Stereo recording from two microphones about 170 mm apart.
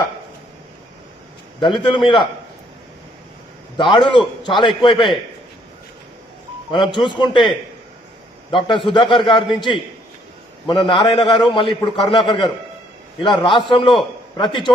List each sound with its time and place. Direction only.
1.6 s a man's voice: 25° left (ahead or behind)
3.9 s a man's voice: 25° left (ahead or behind)
7.0 s a man's voice: 25° left (ahead or behind)